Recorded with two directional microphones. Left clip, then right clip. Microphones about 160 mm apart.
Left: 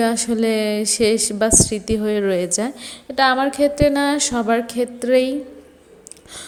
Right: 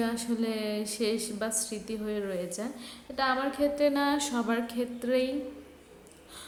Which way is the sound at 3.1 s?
45° left (ahead or behind).